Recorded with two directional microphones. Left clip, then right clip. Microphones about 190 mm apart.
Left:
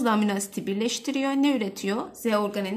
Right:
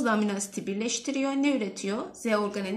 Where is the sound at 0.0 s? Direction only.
50° left (ahead or behind).